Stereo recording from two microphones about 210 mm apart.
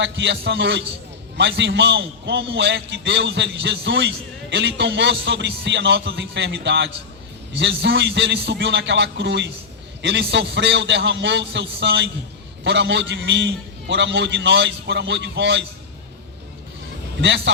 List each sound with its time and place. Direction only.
0.0 s a man's voice: 60° right (ahead or behind)
17.2 s a man's voice: 60° right (ahead or behind)